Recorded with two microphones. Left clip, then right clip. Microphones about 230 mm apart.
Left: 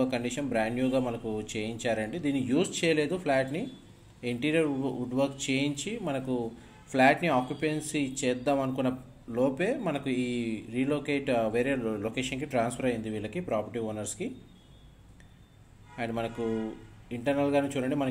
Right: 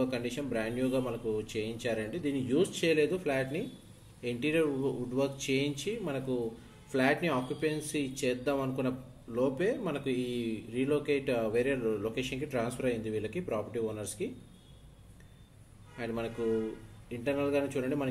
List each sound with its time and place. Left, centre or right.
0.0 s speech: left
16.0 s speech: left